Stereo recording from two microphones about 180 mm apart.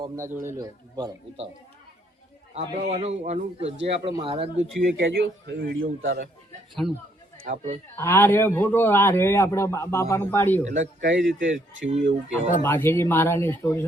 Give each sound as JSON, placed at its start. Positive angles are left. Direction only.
{"t": 0.4, "sound": "speech", "side_deg": -20}
{"t": 2.6, "sound": "a man's voice", "side_deg": -35}
{"t": 4.9, "sound": "a man's voice", "side_deg": -80}
{"t": 7.4, "sound": "a man's voice", "side_deg": -40}
{"t": 7.9, "sound": "a man's voice", "side_deg": 15}
{"t": 10.6, "sound": "a man's voice", "side_deg": -40}
{"t": 11.0, "sound": "speech", "side_deg": -85}
{"t": 12.6, "sound": "a man's voice", "side_deg": 15}